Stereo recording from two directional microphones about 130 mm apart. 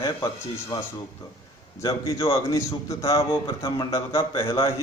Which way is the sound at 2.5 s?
25° left (ahead or behind).